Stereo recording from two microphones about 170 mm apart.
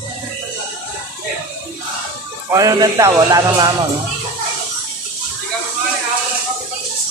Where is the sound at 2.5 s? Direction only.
20° right (ahead or behind).